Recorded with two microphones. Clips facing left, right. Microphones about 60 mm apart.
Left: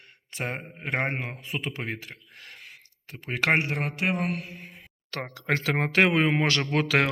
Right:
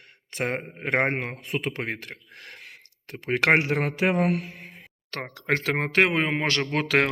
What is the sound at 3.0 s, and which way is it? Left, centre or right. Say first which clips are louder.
Speech: right 4 dB; right.